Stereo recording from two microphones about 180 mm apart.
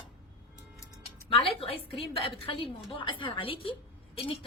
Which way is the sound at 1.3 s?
30° left (ahead or behind).